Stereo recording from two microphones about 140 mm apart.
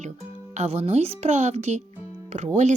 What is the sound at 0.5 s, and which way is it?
Speech, 45° right (ahead or behind).